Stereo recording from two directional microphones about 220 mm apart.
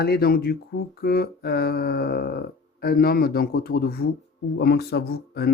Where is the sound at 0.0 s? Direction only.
45° left (ahead or behind).